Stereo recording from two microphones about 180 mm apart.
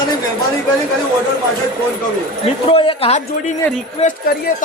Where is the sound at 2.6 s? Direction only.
30° left (ahead or behind).